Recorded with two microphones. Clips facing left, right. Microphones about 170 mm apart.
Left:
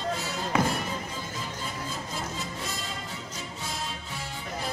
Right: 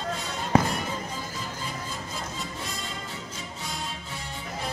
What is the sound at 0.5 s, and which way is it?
Music, 35° right (ahead or behind).